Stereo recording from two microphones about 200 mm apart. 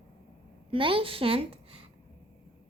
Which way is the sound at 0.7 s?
25° right (ahead or behind).